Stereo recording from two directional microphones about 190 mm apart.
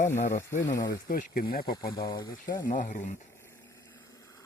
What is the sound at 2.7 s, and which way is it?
Speech, 40° left (ahead or behind).